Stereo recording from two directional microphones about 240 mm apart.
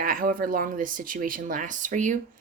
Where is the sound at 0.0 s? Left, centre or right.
Right.